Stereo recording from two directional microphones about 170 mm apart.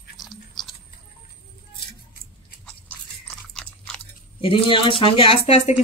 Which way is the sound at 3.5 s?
5° left (ahead or behind).